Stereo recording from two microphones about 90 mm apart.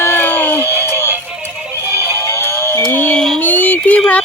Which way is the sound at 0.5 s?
30° right (ahead or behind).